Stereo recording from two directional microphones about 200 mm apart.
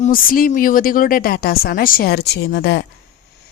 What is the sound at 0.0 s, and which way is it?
A woman's voice, 45° left (ahead or behind).